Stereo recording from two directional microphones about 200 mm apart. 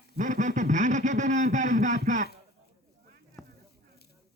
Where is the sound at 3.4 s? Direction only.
Centre (ahead or behind).